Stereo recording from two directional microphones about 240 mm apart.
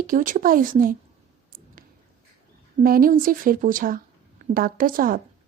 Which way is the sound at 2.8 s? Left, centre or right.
Right.